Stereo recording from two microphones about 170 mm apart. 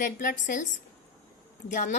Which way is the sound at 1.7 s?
50° left (ahead or behind).